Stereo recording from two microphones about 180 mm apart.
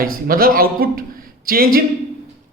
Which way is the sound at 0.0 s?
55° right (ahead or behind).